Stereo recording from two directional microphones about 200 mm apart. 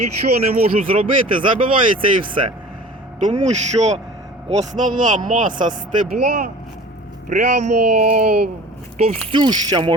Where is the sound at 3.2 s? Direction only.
35° right (ahead or behind).